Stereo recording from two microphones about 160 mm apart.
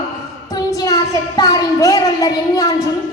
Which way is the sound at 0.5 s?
20° left (ahead or behind).